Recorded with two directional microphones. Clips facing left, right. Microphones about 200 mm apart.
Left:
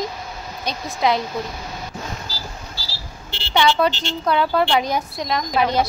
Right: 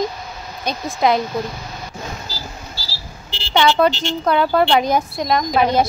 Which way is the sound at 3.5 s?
50° right (ahead or behind).